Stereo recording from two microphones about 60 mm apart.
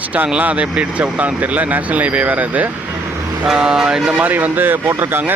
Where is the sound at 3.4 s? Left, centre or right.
Centre.